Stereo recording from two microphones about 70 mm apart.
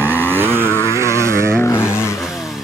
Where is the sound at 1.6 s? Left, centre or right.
Left.